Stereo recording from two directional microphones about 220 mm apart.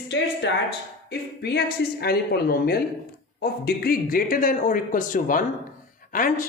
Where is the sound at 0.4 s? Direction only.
55° left (ahead or behind).